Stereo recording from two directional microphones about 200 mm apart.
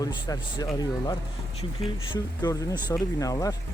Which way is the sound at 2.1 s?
20° left (ahead or behind).